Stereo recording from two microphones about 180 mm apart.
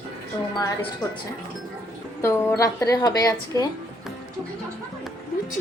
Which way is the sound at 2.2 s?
15° left (ahead or behind).